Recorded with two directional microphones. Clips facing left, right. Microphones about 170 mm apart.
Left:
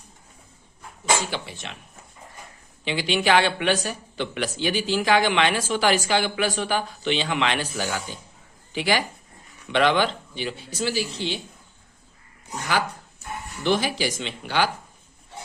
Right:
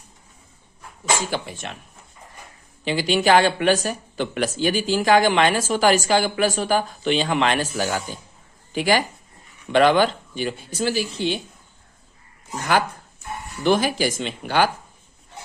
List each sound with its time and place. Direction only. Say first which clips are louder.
1.3 s speech: right 4 dB; 45° right (ahead or behind)
2.8 s speech: right 3 dB; 40° right (ahead or behind)
13.7 s speech: right 4 dB; 50° right (ahead or behind)